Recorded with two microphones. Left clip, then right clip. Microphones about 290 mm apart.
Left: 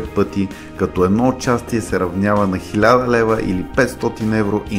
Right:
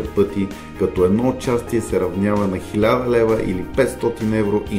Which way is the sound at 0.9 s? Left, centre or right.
Centre.